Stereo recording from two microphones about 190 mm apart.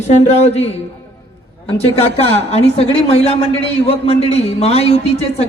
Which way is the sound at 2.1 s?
35° left (ahead or behind).